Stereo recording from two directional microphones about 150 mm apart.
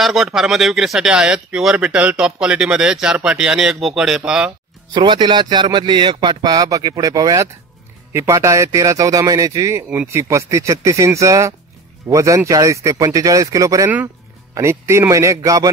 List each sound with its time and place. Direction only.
0.0 s speech: centre (ahead or behind)
4.9 s a man's voice: 30° right (ahead or behind)